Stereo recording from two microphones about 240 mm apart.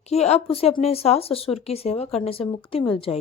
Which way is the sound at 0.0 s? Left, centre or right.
Left.